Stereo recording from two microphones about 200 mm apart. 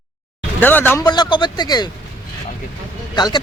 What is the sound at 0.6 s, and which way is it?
Speech, 10° left (ahead or behind).